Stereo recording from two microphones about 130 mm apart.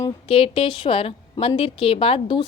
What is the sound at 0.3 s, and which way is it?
A woman's voice, 45° left (ahead or behind).